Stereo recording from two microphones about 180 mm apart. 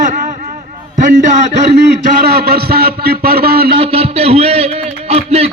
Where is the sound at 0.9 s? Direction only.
45° right (ahead or behind).